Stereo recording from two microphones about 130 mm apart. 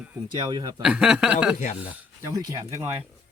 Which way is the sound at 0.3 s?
30° right (ahead or behind).